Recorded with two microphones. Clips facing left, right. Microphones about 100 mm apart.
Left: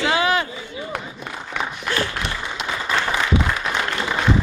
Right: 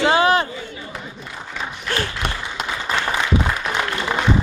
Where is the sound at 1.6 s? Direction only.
65° left (ahead or behind).